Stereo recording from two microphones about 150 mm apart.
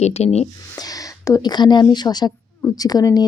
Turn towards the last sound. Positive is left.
turn(degrees=25)  # may be behind; listen again after turning